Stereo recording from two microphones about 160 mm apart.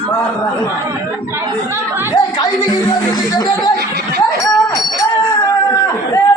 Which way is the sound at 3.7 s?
90° right.